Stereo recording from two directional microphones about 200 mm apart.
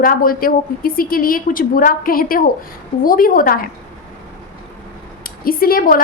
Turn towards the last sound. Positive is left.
turn(degrees=45)  # may be behind; listen again after turning